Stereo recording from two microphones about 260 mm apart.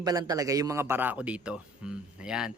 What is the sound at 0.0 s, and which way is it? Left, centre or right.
A man's voice, centre.